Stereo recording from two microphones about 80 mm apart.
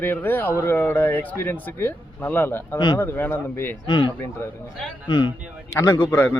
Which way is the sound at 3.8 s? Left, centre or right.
Left.